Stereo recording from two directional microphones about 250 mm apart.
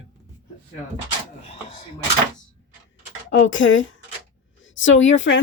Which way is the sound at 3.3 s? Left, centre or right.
Left.